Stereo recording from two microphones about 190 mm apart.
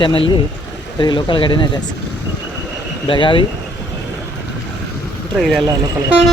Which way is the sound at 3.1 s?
25° left (ahead or behind).